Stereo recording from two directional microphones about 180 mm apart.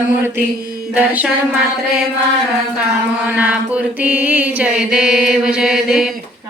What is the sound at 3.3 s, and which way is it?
Mantra, 10° right (ahead or behind).